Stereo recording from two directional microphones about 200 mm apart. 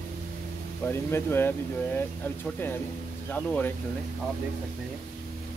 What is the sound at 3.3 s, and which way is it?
Speech, 5° left (ahead or behind).